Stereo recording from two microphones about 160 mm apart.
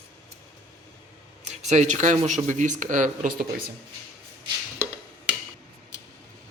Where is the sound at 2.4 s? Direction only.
50° right (ahead or behind).